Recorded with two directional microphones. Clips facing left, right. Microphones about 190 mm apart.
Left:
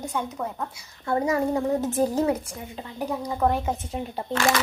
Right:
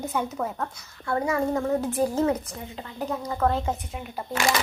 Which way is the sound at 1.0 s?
20° left (ahead or behind).